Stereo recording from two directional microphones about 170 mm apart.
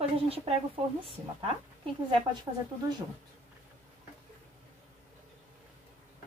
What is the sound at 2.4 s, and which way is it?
Speech, 25° right (ahead or behind).